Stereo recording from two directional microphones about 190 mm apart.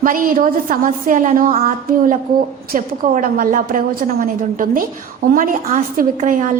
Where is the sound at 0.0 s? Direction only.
45° right (ahead or behind).